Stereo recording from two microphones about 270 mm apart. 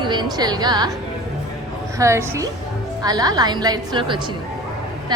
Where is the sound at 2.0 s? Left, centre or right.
Centre.